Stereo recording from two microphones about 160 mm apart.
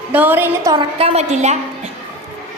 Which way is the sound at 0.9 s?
40° right (ahead or behind).